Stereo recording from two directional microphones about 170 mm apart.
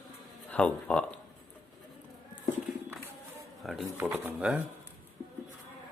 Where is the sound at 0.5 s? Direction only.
5° left (ahead or behind).